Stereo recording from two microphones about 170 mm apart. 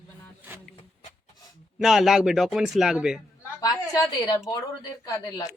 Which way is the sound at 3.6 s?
20° left (ahead or behind).